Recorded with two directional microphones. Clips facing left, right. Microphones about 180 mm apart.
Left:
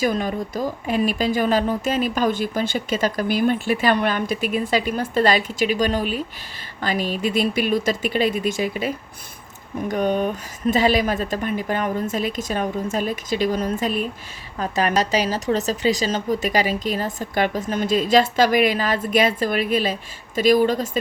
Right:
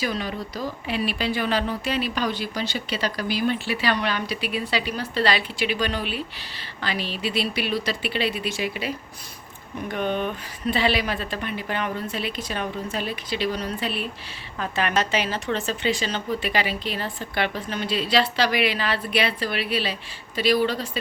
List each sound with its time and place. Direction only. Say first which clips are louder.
0.0 s a woman's voice: left 6 dB; 45° left (ahead or behind)
9.9 s a woman's voice: left 5 dB; 40° left (ahead or behind)